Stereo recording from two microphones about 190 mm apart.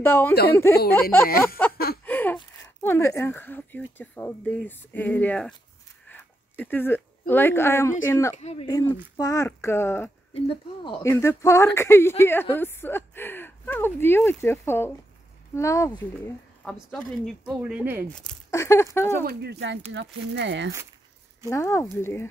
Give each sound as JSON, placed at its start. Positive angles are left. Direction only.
{"t": 0.0, "sound": "speech", "side_deg": 10}
{"t": 1.7, "sound": "a sound", "side_deg": 55}
{"t": 2.0, "sound": "a sound", "side_deg": 10}
{"t": 2.3, "sound": "speech", "side_deg": 15}
{"t": 6.0, "sound": "a sound", "side_deg": 10}
{"t": 8.0, "sound": "speech", "side_deg": 15}
{"t": 8.4, "sound": "speech", "side_deg": 35}
{"t": 8.6, "sound": "speech", "side_deg": 20}
{"t": 10.3, "sound": "speech", "side_deg": 25}
{"t": 16.6, "sound": "speech", "side_deg": 0}
{"t": 18.5, "sound": "speech", "side_deg": 15}
{"t": 19.2, "sound": "speech", "side_deg": -60}
{"t": 21.5, "sound": "speech", "side_deg": 15}